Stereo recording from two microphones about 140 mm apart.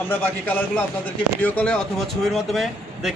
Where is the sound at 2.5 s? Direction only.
Centre (ahead or behind).